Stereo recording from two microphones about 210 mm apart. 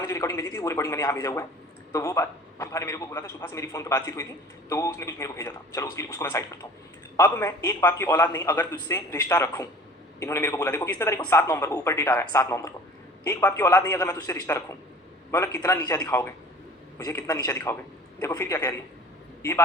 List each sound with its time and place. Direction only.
0.1 s speech: 15° left (ahead or behind)